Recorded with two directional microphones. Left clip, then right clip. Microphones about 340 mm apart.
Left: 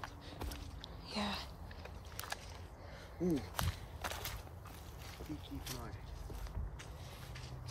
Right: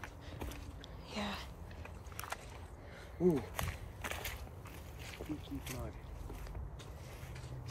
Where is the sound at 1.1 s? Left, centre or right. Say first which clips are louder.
Left 1 dB; centre.